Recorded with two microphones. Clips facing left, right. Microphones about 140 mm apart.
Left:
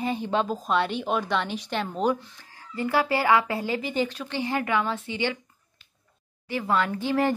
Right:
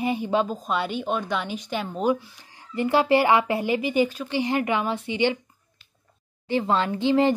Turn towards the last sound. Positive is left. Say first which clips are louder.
# right 4 dB
turn(degrees=-20)  # may be behind; listen again after turning